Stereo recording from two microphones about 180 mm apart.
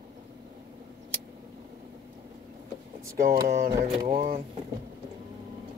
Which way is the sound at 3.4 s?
55° right (ahead or behind).